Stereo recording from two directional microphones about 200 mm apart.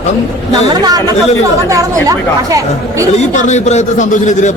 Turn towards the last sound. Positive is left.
turn(degrees=35)  # may be behind; listen again after turning